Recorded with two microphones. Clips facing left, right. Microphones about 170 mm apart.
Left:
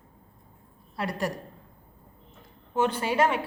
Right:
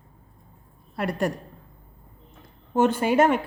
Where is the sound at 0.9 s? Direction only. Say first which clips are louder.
Right 4 dB; 50° right (ahead or behind).